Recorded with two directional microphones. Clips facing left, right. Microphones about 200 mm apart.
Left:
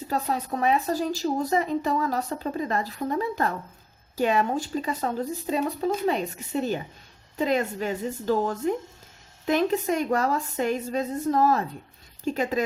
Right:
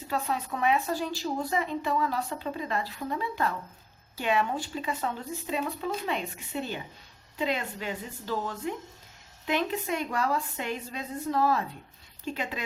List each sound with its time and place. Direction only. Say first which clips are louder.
0.1 s speech: left 3 dB; 40° left (ahead or behind)